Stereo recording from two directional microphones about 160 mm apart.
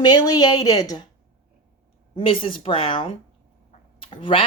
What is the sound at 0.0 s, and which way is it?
Speech, 25° left (ahead or behind).